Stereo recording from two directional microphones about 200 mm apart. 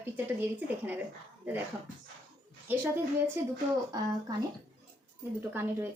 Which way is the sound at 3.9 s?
20° right (ahead or behind).